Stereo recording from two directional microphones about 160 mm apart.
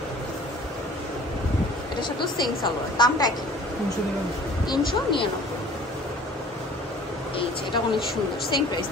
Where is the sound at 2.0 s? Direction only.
25° left (ahead or behind).